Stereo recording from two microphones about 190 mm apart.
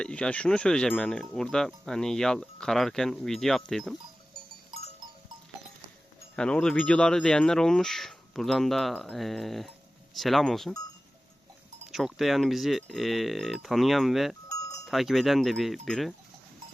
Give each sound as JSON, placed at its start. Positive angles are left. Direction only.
{"t": 0.0, "sound": "speech", "side_deg": 5}
{"t": 6.3, "sound": "speech", "side_deg": 5}
{"t": 11.9, "sound": "speech", "side_deg": 0}
{"t": 14.5, "sound": "livestock", "side_deg": 15}
{"t": 14.8, "sound": "speech", "side_deg": 0}